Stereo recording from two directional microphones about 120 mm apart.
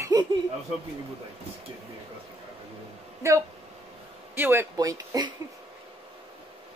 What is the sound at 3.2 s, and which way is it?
Speech, 25° right (ahead or behind).